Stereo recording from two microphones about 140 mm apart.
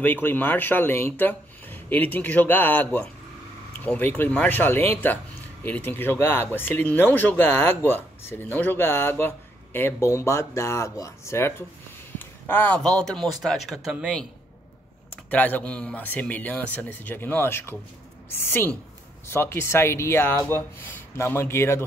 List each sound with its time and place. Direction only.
0.0 s speech: 15° left (ahead or behind); by 14.2 s 5° right (ahead or behind)
15.2 s speech: 10° left (ahead or behind)